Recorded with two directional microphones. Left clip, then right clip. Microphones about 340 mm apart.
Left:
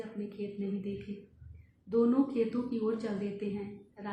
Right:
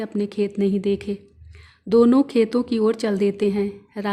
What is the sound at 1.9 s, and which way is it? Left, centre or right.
A woman's voice, right.